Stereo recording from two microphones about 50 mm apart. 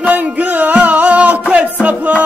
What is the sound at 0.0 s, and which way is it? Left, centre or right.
Music, right.